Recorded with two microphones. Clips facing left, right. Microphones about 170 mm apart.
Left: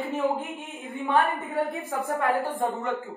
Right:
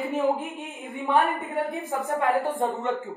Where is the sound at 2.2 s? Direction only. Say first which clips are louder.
Right 2 dB; 25° right (ahead or behind).